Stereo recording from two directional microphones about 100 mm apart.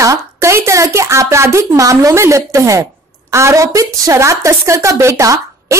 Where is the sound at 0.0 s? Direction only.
30° right (ahead or behind).